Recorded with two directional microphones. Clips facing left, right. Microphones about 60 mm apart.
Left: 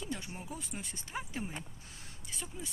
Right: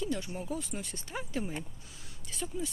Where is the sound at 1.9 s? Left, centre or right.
Left.